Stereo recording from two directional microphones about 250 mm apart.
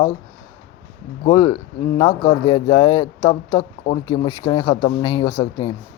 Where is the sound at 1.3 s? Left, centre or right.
Centre.